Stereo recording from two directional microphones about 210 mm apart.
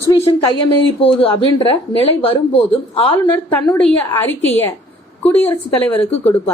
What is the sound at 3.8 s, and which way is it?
Speech, 5° left (ahead or behind).